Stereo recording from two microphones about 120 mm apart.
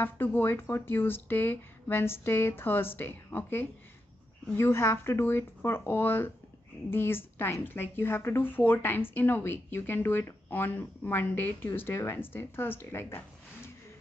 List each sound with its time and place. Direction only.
0.0 s speech: 15° left (ahead or behind)